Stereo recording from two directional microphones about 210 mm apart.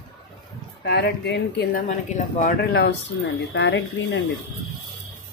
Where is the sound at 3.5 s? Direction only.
55° left (ahead or behind).